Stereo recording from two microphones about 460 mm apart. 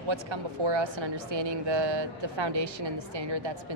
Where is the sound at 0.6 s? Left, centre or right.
Right.